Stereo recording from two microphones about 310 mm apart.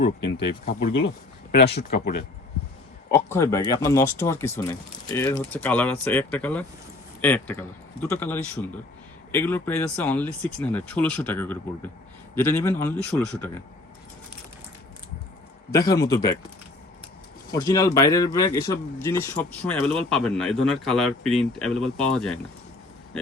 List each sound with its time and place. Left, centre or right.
0.0 s speech: left
3.2 s speech: centre
15.9 s speech: centre
17.5 s speech: centre